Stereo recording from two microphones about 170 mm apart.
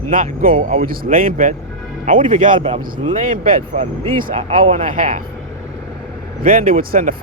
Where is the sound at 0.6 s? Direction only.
40° right (ahead or behind).